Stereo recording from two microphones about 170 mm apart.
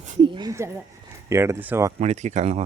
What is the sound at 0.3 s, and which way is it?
Speech, 25° right (ahead or behind).